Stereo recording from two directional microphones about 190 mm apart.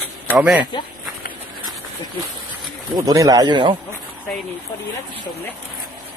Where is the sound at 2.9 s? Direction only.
20° right (ahead or behind).